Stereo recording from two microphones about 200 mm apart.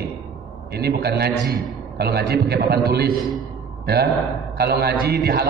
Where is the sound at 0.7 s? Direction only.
55° right (ahead or behind).